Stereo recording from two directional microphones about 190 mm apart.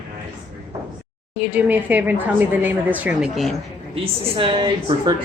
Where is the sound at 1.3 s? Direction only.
10° right (ahead or behind).